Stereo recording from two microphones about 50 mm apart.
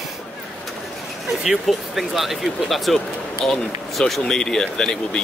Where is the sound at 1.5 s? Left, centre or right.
Centre.